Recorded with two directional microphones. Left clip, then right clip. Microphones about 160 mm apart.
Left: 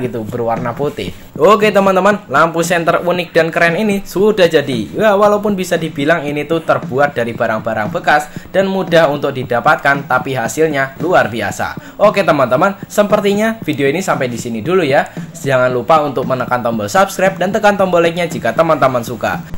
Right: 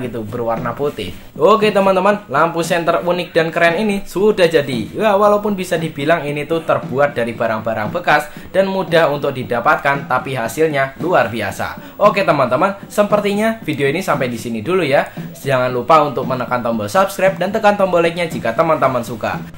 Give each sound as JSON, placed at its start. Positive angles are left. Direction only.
{"t": 0.0, "sound": "a man's voice", "side_deg": 25}